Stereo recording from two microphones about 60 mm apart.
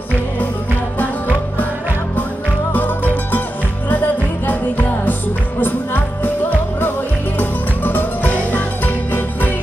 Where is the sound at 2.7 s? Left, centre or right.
Left.